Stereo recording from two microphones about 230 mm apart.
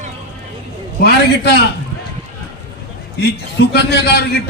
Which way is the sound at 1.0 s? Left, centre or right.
Left.